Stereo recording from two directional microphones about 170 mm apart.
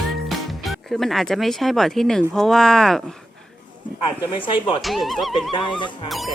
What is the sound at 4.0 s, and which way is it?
Speech, 30° left (ahead or behind).